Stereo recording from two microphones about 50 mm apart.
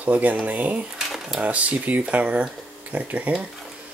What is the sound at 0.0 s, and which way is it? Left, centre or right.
Speech, right.